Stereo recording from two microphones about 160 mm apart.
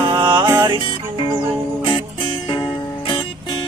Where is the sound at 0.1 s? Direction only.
30° right (ahead or behind).